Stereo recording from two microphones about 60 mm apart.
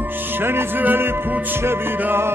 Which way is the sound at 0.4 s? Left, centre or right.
Right.